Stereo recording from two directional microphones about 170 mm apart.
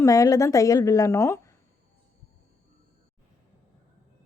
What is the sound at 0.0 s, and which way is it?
A woman's voice, 20° left (ahead or behind).